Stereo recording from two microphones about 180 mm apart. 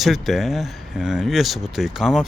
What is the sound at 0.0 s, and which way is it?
Speech, centre (ahead or behind).